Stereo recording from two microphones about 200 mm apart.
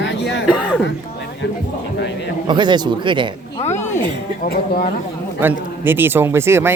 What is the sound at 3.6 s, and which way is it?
Speech, 35° left (ahead or behind).